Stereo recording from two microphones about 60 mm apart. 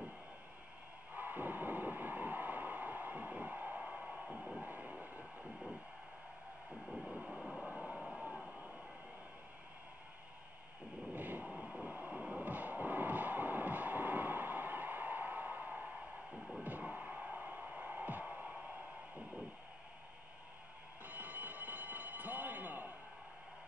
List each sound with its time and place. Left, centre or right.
1.1 s a sound: right; by 4.6 s centre
4.6 s train: right
7.1 s train: centre
7.6 s vehicle: right
11.1 s vehicle: right
11.5 s train: centre
12.2 s vehicle: right
16.6 s a sound: right
21.0 s train: right